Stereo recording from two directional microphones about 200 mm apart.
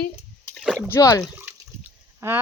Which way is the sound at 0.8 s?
15° left (ahead or behind).